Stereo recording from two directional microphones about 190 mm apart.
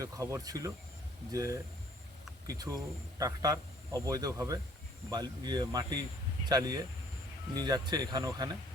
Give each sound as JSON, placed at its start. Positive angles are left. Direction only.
{"t": 0.0, "sound": "speech", "side_deg": -15}